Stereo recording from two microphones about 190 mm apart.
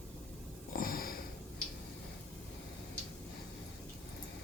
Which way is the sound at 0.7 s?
50° left (ahead or behind).